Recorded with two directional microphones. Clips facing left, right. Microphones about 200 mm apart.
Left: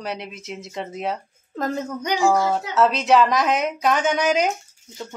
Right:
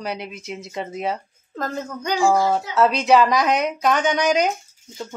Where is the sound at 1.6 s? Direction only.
20° left (ahead or behind).